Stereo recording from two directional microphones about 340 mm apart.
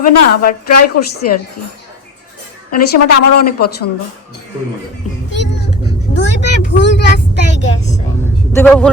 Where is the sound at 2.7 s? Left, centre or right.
Left.